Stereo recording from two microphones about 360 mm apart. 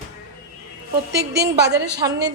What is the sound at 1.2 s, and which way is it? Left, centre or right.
Speech, right.